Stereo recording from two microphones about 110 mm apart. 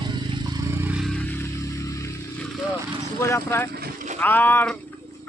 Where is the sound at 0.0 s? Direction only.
45° right (ahead or behind); by 0.9 s 30° right (ahead or behind).